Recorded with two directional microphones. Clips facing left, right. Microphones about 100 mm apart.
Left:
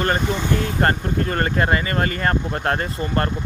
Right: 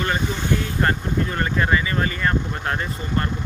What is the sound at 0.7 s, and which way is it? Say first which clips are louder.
Speech: left 2 dB; 45° left (ahead or behind).